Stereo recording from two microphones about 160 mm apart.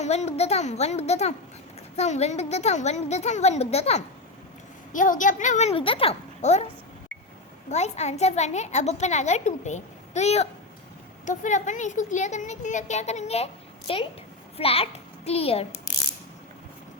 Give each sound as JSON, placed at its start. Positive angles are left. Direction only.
{"t": 0.0, "sound": "a child's voice", "side_deg": 45}
{"t": 4.9, "sound": "a child's voice", "side_deg": 55}
{"t": 7.7, "sound": "a child's voice", "side_deg": 45}